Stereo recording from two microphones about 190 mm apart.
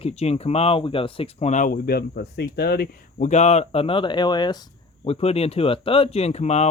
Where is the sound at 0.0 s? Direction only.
35° left (ahead or behind).